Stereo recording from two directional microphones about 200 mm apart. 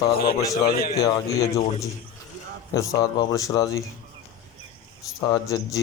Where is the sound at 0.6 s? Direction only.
45° left (ahead or behind).